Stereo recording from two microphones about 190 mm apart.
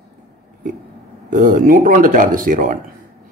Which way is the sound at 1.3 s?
45° right (ahead or behind).